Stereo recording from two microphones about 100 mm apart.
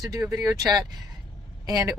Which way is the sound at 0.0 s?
35° right (ahead or behind).